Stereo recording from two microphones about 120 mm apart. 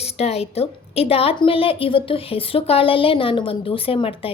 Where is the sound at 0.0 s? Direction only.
60° left (ahead or behind).